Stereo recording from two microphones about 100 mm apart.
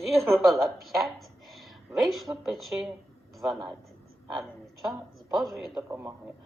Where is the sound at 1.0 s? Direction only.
Centre (ahead or behind).